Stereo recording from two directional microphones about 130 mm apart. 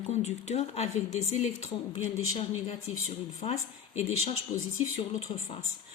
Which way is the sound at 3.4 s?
50° left (ahead or behind).